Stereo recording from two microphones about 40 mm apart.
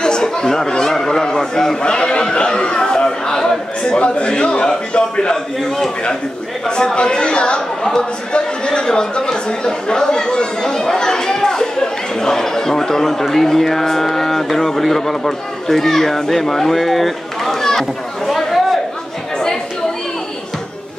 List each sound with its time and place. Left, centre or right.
0.0 s speech: centre
1.8 s a sound: left
4.0 s a man's voice: left
6.7 s speech: left; by 18.8 s centre
19.3 s chatter: centre